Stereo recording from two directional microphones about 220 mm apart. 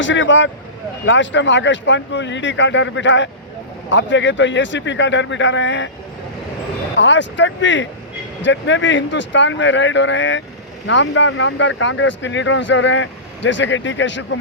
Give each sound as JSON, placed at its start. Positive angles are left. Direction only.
{"t": 0.0, "sound": "speech", "side_deg": 55}
{"t": 6.9, "sound": "speech", "side_deg": 55}